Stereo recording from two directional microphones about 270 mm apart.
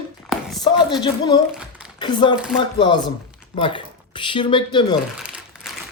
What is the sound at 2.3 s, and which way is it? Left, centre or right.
Speech, centre.